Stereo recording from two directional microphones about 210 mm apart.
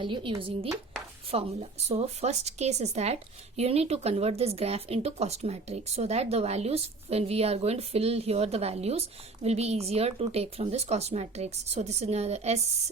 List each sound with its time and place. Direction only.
0.0 s speech: 25° right (ahead or behind)